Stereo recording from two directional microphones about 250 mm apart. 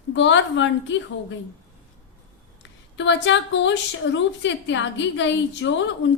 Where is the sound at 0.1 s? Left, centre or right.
Left.